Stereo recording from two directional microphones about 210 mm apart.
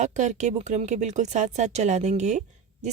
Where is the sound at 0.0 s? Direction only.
35° right (ahead or behind).